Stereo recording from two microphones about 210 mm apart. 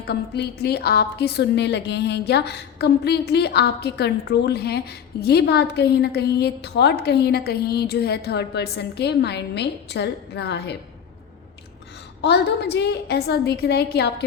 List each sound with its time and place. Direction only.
0.1 s a woman's voice: 50° left (ahead or behind)
12.2 s a woman's voice: 55° left (ahead or behind)